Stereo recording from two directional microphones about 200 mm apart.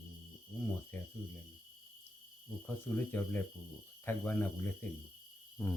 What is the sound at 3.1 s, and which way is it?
Speech, 10° left (ahead or behind).